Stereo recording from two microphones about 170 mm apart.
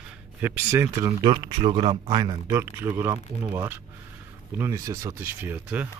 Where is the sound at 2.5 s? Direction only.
15° right (ahead or behind).